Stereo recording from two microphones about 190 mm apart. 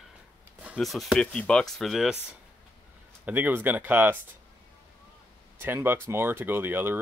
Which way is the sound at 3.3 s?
10° right (ahead or behind).